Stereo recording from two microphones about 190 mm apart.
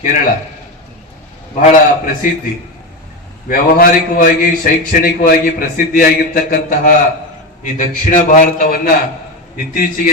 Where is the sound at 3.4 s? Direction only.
45° left (ahead or behind).